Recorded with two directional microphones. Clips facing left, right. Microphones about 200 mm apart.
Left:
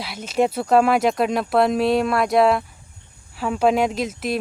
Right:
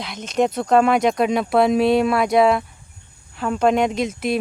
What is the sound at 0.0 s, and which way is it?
Speech, 5° left (ahead or behind).